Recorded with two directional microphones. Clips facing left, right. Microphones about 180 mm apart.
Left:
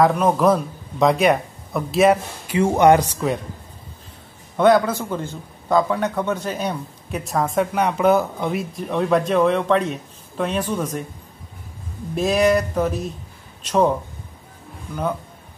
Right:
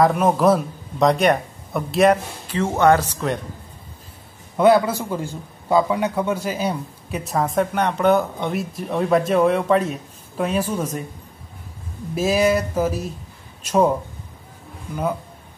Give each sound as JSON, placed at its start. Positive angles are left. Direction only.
{"t": 0.0, "sound": "a man's voice", "side_deg": -5}
{"t": 2.4, "sound": "speech", "side_deg": 10}
{"t": 4.6, "sound": "a man's voice", "side_deg": -5}
{"t": 12.2, "sound": "a man's voice", "side_deg": -5}